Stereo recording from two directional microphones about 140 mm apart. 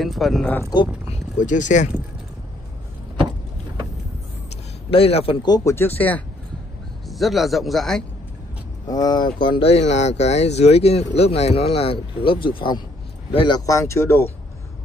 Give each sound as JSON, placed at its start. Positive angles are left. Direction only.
{"t": 0.0, "sound": "speech", "side_deg": 0}
{"t": 1.4, "sound": "speech", "side_deg": 65}
{"t": 4.9, "sound": "speech", "side_deg": 45}
{"t": 7.1, "sound": "speech", "side_deg": 0}
{"t": 8.8, "sound": "speech", "side_deg": 30}
{"t": 13.6, "sound": "speech", "side_deg": 25}